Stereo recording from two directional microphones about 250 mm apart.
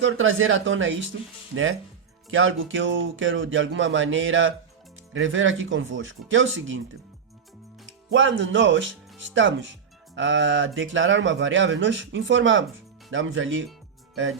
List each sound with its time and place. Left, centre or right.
0.0 s speech: right
8.1 s speech: right